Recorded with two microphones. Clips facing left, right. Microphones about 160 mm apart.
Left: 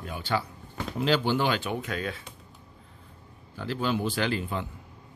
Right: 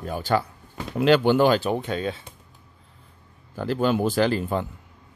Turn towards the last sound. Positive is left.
turn(degrees=-40)  # may be behind; listen again after turning